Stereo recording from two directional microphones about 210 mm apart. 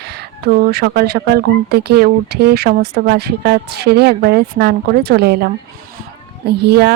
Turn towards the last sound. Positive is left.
turn(degrees=-50)  # may be behind; listen again after turning